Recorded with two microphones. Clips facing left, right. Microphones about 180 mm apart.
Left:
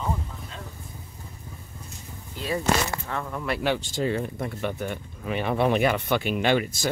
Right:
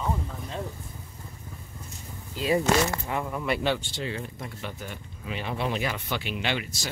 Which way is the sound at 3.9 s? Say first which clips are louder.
Left 7 dB; 45° left (ahead or behind).